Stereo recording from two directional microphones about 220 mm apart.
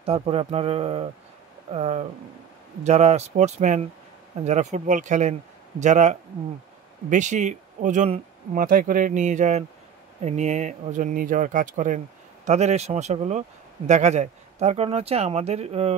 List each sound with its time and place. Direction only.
0.0 s speech: 25° right (ahead or behind)